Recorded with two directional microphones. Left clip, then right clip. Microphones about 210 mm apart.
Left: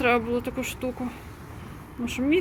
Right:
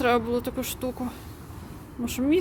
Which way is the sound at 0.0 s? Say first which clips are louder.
Even; 5° right (ahead or behind).